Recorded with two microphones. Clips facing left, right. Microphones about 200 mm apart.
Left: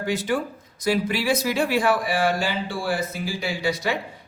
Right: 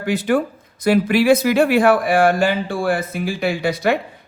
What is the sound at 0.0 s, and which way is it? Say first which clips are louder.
Speech: right 6 dB; 60° right (ahead or behind).